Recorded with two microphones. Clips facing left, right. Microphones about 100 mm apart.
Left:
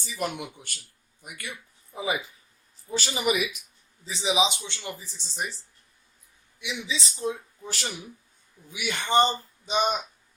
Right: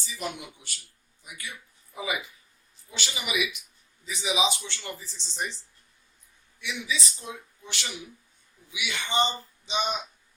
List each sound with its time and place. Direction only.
0.2 s speech: 55° left (ahead or behind)
1.9 s speech: 30° left (ahead or behind)
2.9 s speech: 40° left (ahead or behind)
4.0 s speech: 30° left (ahead or behind); by 5.5 s 5° left (ahead or behind)
6.6 s speech: 20° left (ahead or behind); by 10.0 s 50° left (ahead or behind)